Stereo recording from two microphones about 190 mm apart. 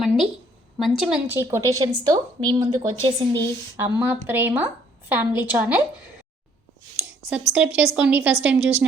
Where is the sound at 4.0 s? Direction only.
10° right (ahead or behind).